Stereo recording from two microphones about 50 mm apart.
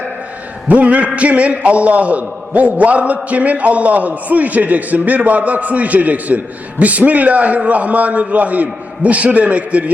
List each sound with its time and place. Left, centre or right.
0.7 s a man's voice: right